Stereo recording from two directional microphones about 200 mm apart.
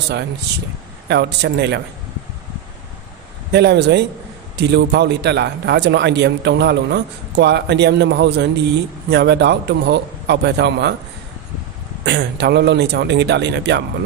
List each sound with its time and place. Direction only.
1.0 s a man's voice: 60° right (ahead or behind)
3.5 s a man's voice: 60° right (ahead or behind)
12.0 s a man's voice: 60° right (ahead or behind)